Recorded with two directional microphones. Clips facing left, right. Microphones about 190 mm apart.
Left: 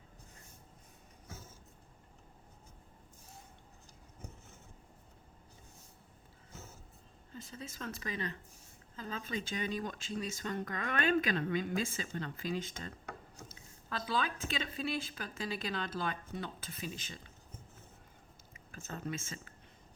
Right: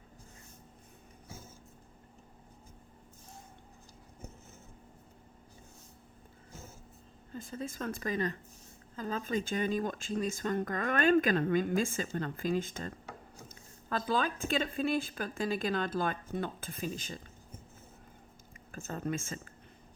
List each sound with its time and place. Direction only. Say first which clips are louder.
7.3 s speech: right 7 dB; 50° right (ahead or behind)
13.9 s speech: right 4 dB; 45° right (ahead or behind)
18.5 s speech: right 5 dB; 50° right (ahead or behind)